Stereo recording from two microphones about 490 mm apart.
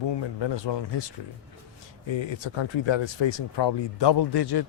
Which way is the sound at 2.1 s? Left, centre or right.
Left.